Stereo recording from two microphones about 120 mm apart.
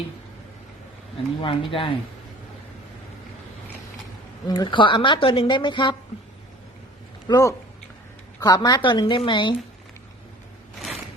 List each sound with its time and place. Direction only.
1.4 s speech: 45° left (ahead or behind)
4.4 s a woman's voice: 35° left (ahead or behind)
7.3 s a woman's voice: 30° left (ahead or behind)